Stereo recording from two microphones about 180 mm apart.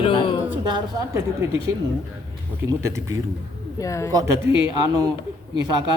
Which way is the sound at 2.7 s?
15° right (ahead or behind).